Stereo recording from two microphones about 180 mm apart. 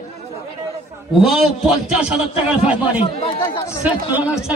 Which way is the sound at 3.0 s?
35° left (ahead or behind).